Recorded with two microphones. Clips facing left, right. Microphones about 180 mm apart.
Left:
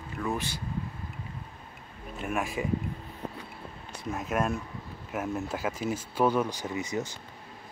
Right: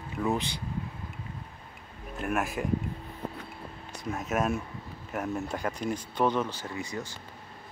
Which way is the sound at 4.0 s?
Centre (ahead or behind).